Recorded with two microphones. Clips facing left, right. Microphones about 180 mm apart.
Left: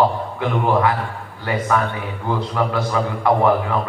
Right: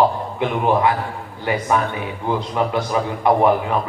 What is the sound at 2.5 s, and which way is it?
A man's voice, 20° right (ahead or behind).